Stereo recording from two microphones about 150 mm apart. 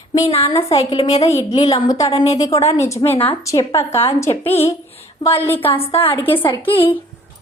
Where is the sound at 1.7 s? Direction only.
25° left (ahead or behind).